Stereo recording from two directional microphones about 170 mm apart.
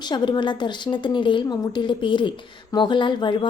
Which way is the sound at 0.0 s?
25° left (ahead or behind).